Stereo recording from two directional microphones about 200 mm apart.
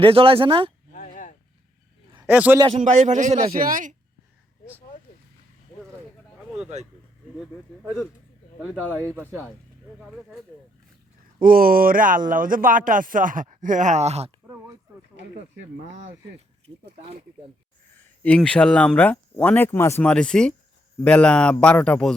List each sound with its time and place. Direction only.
0.0 s speech: 25° right (ahead or behind)
0.9 s a sound: 40° left (ahead or behind)
2.2 s a man's voice: 10° right (ahead or behind)
2.7 s a man's voice: 35° right (ahead or behind)
7.3 s speech: centre (ahead or behind)
10.0 s speech: centre (ahead or behind)
11.3 s speech: 45° right (ahead or behind)
18.2 s speech: 5° left (ahead or behind)